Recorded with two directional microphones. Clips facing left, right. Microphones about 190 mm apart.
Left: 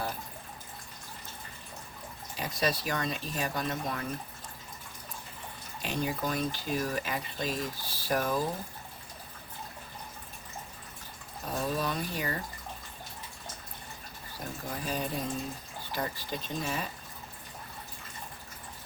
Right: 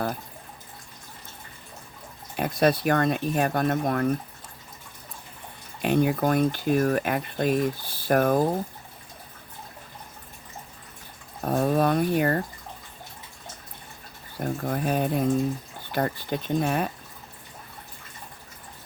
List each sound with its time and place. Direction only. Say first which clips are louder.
2.3 s speech: right 9 dB; 55° right (ahead or behind)
5.8 s speech: right 10 dB; 60° right (ahead or behind)
11.4 s speech: right 10 dB; 55° right (ahead or behind)
14.3 s speech: right 10 dB; 55° right (ahead or behind)